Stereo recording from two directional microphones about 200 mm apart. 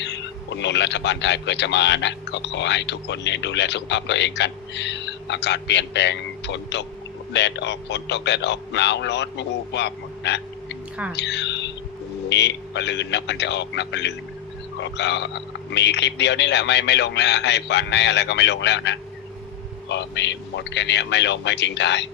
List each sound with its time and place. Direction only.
0.0 s a man's voice: 60° left (ahead or behind)